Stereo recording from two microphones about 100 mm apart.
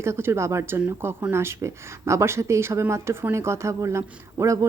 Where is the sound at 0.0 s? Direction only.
25° right (ahead or behind).